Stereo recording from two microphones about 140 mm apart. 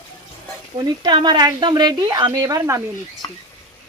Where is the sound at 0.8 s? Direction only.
30° right (ahead or behind).